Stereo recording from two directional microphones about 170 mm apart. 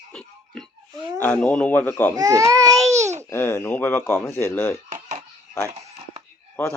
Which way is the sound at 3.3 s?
15° left (ahead or behind).